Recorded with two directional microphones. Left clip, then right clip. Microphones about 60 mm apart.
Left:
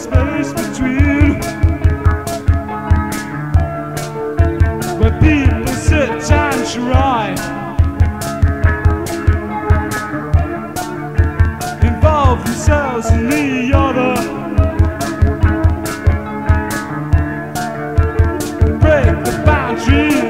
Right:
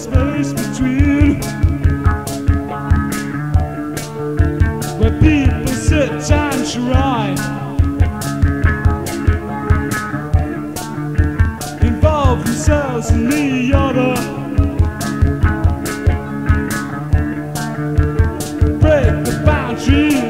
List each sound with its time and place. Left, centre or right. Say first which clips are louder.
0.2 s music: even; right
5.0 s music: right 1 dB; right
11.8 s music: left 2 dB; right
18.8 s music: left 1 dB; right